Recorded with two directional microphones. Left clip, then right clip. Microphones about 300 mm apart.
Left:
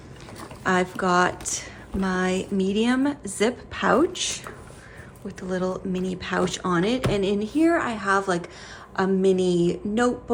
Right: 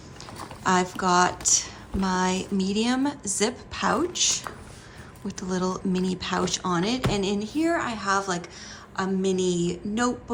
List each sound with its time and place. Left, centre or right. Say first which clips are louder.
0.3 s a woman's voice: even; centre